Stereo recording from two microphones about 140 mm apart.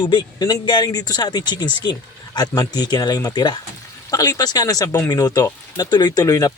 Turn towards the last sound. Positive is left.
turn(degrees=25)  # may be behind; listen again after turning